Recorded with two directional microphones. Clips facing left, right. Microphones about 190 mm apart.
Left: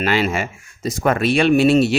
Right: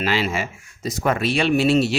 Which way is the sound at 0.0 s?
55° left (ahead or behind).